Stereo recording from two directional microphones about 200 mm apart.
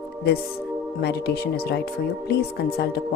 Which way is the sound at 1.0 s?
55° left (ahead or behind).